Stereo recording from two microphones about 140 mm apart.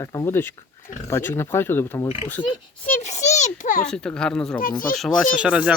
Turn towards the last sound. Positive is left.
turn(degrees=-10)  # may be behind; listen again after turning